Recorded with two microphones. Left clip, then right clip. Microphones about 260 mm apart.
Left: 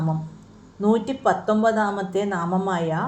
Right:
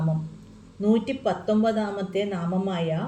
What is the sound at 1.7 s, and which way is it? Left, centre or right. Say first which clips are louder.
Speech: left 5 dB; left.